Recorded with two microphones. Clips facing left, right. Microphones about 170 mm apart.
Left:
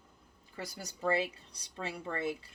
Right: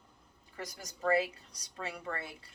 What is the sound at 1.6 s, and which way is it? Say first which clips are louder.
Speech: left 1 dB; 30° left (ahead or behind).